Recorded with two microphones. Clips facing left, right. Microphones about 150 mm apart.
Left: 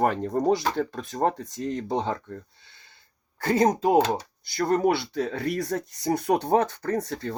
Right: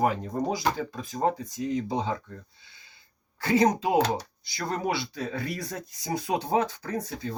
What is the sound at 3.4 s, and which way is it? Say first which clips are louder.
Speech: left 1 dB; 50° left (ahead or behind).